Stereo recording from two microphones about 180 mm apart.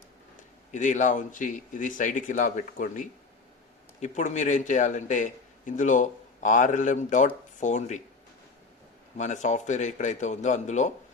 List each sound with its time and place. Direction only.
0.7 s a man's voice: 45° left (ahead or behind)
9.1 s speech: 40° left (ahead or behind)